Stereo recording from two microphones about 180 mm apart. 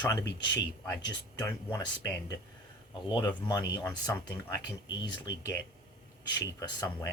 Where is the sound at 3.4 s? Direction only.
20° left (ahead or behind).